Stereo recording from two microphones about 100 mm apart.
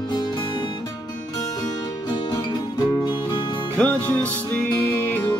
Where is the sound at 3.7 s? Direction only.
15° left (ahead or behind).